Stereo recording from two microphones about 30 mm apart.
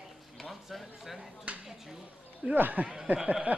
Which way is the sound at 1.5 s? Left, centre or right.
Right.